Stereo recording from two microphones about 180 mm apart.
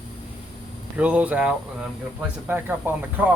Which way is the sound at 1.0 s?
5° right (ahead or behind).